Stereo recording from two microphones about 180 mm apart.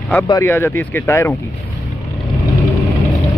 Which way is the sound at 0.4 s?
15° left (ahead or behind).